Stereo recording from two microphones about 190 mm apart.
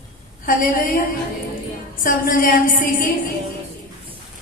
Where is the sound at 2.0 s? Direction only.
45° left (ahead or behind).